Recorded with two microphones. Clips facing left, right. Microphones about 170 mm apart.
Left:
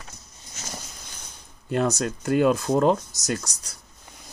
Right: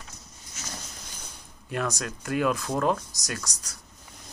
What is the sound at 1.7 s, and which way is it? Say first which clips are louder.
Speech: left 7 dB; 25° left (ahead or behind).